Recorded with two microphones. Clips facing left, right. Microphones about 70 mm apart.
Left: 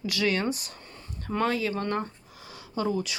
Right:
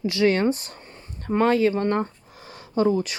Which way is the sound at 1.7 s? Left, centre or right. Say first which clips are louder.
Right 6 dB; right.